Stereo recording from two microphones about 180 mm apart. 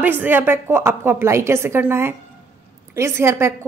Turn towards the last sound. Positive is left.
turn(degrees=-15)  # may be behind; listen again after turning